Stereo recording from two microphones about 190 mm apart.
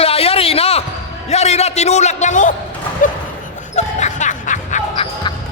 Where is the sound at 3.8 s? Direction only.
40° left (ahead or behind).